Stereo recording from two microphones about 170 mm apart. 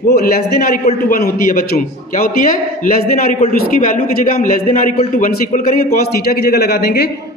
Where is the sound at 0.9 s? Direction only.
55° left (ahead or behind).